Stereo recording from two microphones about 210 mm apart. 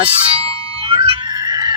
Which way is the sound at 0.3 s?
25° right (ahead or behind).